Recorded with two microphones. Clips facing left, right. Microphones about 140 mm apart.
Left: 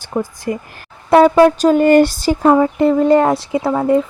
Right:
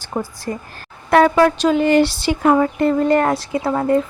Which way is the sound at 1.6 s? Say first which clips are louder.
Left 4 dB; 45° left (ahead or behind).